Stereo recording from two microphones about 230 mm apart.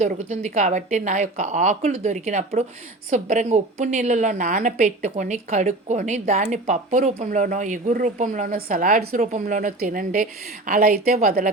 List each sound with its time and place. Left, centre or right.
0.0 s a woman's voice: right